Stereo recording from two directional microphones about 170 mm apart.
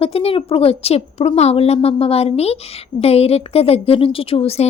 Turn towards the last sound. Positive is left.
turn(degrees=35)  # may be behind; listen again after turning